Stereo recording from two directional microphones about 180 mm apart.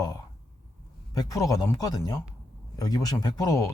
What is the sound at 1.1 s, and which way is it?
Speech, 20° left (ahead or behind).